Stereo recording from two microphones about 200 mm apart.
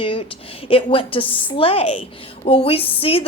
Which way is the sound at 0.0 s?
25° left (ahead or behind).